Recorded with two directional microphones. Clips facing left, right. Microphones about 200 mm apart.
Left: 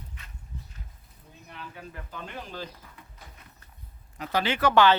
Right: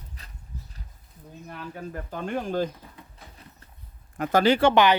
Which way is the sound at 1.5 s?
45° right (ahead or behind).